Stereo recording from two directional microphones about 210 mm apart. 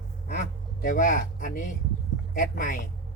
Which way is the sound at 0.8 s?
40° left (ahead or behind).